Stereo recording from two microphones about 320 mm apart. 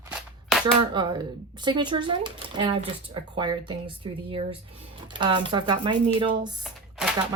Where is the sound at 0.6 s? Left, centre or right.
Centre.